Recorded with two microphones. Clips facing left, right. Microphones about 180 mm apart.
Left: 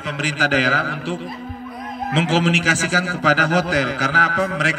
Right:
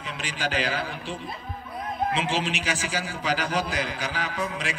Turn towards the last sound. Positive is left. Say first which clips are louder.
# left 8 dB
turn(degrees=90)